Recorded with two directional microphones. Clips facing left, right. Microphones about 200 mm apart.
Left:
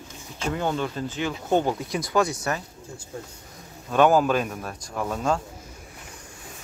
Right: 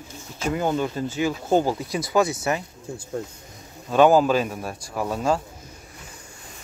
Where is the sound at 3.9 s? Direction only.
5° right (ahead or behind).